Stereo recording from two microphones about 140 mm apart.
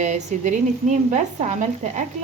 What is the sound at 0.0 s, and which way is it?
Speech, 60° right (ahead or behind).